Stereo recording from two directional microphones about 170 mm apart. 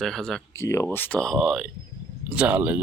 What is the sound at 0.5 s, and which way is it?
Speech, 15° left (ahead or behind).